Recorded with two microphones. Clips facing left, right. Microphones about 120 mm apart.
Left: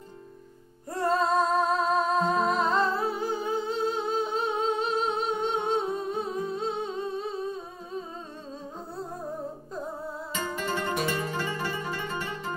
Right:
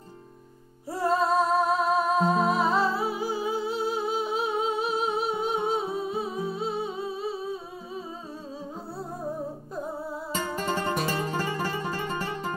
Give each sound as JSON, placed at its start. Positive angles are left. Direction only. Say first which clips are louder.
{"t": 0.8, "sound": "music", "louder": "right 1 dB", "side_deg": -5}
{"t": 10.3, "sound": "music", "louder": "right 2 dB", "side_deg": -40}